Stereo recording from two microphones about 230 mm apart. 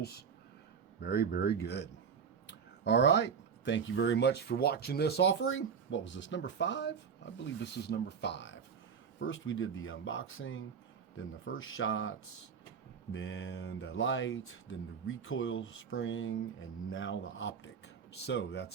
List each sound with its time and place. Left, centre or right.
0.0 s speech: left
13.1 s speech: left